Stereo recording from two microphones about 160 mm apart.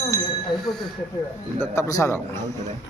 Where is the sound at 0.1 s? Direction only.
50° right (ahead or behind).